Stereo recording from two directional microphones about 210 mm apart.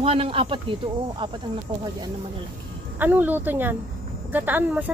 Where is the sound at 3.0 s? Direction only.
10° right (ahead or behind).